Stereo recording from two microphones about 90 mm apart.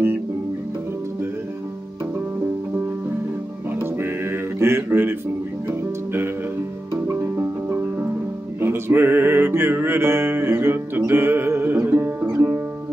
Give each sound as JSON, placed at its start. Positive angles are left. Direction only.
{"t": 3.8, "sound": "music", "side_deg": -25}